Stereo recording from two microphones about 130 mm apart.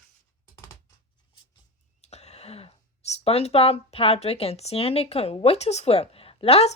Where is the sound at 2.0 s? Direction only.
55° left (ahead or behind).